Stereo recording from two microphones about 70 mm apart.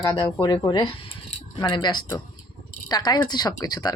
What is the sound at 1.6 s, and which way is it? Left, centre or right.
Speech, left.